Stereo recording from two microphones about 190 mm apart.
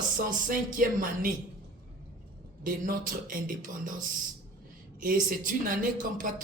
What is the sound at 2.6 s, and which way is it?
Speech, 45° right (ahead or behind).